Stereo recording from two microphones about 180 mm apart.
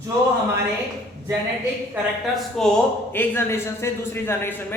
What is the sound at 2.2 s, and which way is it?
A man's voice, 5° left (ahead or behind).